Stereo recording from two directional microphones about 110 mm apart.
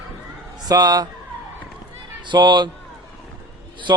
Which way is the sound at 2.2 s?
45° right (ahead or behind).